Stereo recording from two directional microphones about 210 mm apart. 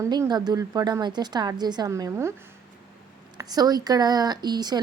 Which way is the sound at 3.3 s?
20° right (ahead or behind).